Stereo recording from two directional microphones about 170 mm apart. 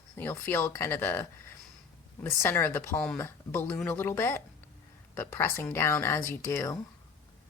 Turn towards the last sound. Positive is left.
turn(degrees=15)  # may be behind; listen again after turning